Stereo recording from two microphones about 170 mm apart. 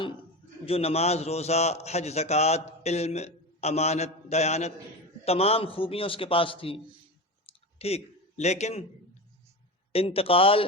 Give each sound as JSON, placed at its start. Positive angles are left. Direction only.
{"t": 0.6, "sound": "a man's voice", "side_deg": 35}
{"t": 7.4, "sound": "clicking", "side_deg": 35}
{"t": 9.9, "sound": "a man's voice", "side_deg": 35}